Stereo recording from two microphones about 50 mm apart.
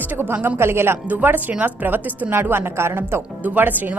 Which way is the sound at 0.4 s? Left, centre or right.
Right.